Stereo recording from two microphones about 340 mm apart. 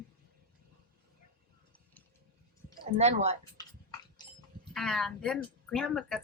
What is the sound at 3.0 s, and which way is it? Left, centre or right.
Speech, centre.